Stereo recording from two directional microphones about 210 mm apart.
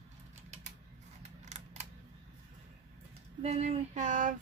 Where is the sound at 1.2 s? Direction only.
35° right (ahead or behind).